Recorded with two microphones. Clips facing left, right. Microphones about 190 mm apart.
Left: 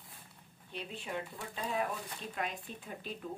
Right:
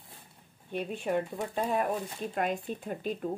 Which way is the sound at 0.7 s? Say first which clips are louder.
Right 10 dB; 50° right (ahead or behind).